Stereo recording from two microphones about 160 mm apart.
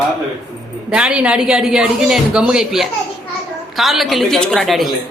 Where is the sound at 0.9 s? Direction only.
5° right (ahead or behind).